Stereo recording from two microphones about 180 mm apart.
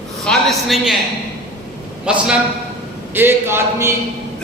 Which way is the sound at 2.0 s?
5° right (ahead or behind).